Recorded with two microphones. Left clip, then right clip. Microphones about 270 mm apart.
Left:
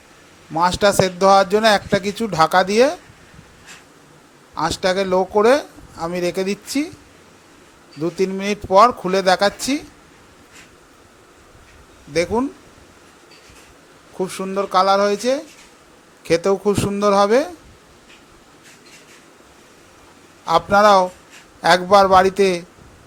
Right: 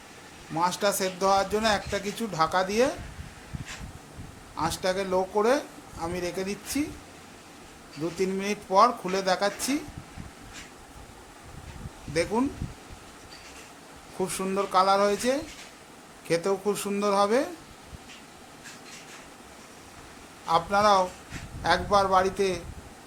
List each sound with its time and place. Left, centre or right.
0.5 s speech: left
4.5 s speech: left
8.0 s speech: left
12.1 s speech: centre
14.2 s speech: centre
20.4 s speech: left